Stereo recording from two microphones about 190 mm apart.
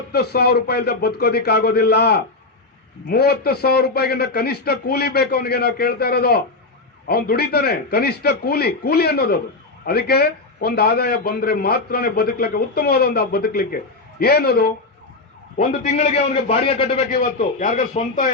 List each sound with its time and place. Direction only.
0.1 s a man's voice: 55° left (ahead or behind)
15.5 s a man's voice: 35° left (ahead or behind)
17.1 s a man's voice: 40° left (ahead or behind)